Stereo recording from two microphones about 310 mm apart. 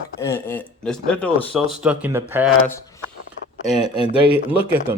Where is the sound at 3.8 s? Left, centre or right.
Centre.